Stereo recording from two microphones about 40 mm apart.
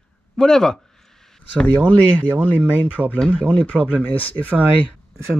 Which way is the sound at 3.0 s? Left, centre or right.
Centre.